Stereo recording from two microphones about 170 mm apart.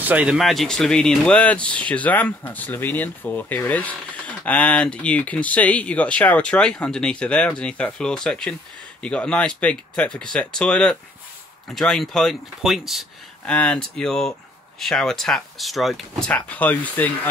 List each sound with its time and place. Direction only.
0.0 s speech: 10° right (ahead or behind); by 17.3 s 10° left (ahead or behind)